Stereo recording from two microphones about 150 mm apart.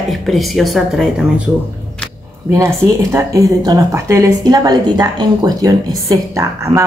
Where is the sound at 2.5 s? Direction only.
15° right (ahead or behind).